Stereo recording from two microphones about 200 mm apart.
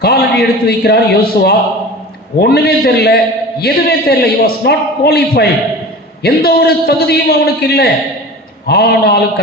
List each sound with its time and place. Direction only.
0.0 s a man's voice: 50° left (ahead or behind)